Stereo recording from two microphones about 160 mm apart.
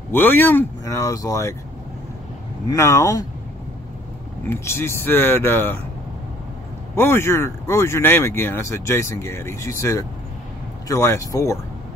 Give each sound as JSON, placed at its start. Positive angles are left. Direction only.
{"t": 0.1, "sound": "speech", "side_deg": 10}
{"t": 2.7, "sound": "speech", "side_deg": 20}
{"t": 4.5, "sound": "speech", "side_deg": 15}
{"t": 7.0, "sound": "speech", "side_deg": 15}